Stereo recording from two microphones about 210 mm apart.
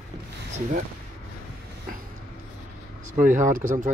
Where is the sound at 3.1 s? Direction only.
40° right (ahead or behind).